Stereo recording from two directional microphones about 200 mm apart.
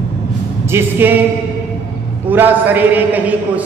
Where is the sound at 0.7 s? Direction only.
10° right (ahead or behind).